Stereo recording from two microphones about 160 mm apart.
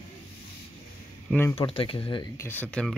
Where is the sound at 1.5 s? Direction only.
35° left (ahead or behind).